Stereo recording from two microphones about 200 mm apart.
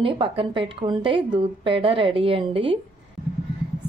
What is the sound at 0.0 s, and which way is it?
A woman's voice, 25° right (ahead or behind).